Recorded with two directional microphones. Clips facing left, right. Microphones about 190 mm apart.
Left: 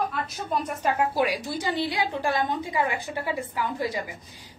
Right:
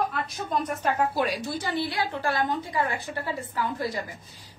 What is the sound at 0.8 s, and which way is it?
A woman's voice, 10° left (ahead or behind).